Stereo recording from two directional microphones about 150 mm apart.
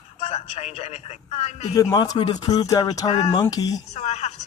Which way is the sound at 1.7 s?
25° left (ahead or behind).